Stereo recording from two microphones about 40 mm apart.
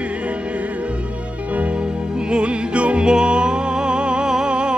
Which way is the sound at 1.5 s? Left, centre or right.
Right.